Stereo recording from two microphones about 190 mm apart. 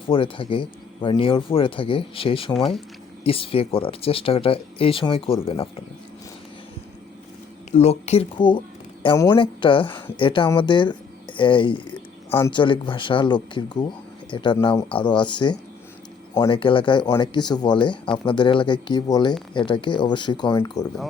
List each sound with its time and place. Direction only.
0.1 s speech: 25° left (ahead or behind)
7.7 s speech: 35° left (ahead or behind); by 20.8 s 15° left (ahead or behind)